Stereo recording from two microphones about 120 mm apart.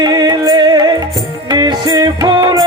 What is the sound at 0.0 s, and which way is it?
Music, 35° right (ahead or behind).